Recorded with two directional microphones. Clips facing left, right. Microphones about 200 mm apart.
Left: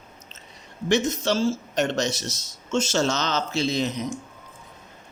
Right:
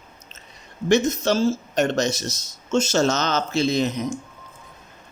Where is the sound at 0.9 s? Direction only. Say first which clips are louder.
Right 3 dB; 45° right (ahead or behind).